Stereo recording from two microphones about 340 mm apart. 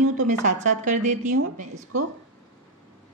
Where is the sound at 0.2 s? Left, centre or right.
Right.